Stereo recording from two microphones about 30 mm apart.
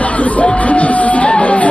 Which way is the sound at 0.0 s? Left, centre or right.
Left.